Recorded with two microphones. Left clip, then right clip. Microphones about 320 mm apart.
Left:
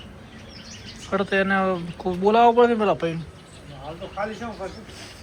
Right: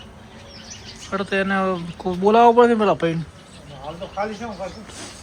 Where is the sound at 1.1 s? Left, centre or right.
Centre.